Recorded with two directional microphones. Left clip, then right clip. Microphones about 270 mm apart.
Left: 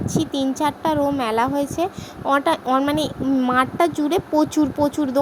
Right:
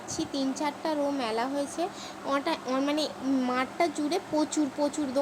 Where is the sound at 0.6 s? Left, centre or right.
Left.